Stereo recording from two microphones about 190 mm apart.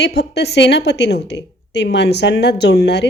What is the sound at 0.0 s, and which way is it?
A woman's voice, 60° left (ahead or behind).